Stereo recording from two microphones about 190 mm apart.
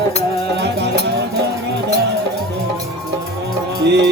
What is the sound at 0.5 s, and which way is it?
Music, 65° right (ahead or behind).